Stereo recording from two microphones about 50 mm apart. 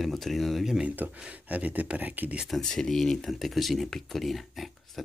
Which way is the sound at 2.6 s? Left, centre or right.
Centre.